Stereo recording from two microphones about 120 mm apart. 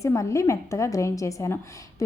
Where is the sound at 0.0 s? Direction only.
25° left (ahead or behind).